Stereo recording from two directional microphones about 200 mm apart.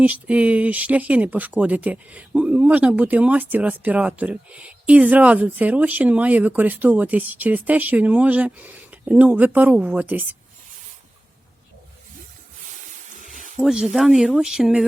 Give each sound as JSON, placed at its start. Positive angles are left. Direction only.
{"t": 0.0, "sound": "speech", "side_deg": -5}
{"t": 13.6, "sound": "speech", "side_deg": 0}